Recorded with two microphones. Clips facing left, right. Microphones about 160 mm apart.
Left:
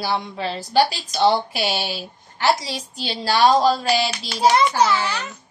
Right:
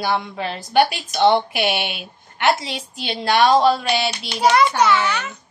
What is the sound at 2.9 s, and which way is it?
Speech, 35° left (ahead or behind).